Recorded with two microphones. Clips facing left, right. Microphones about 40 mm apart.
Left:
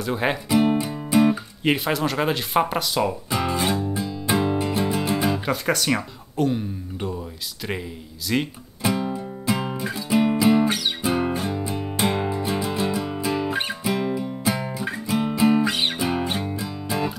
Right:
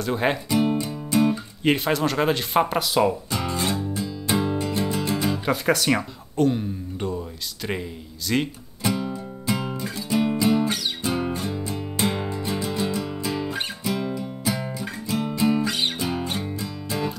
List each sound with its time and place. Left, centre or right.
0.0 s speech: centre
0.5 s music: centre
1.6 s speech: centre
3.3 s music: centre
5.4 s speech: centre
8.8 s music: centre